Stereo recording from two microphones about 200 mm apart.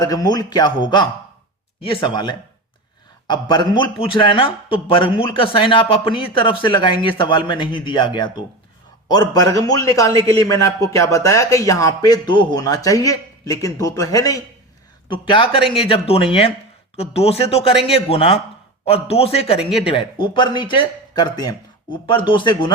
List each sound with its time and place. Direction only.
0.0 s a man's voice: 20° left (ahead or behind)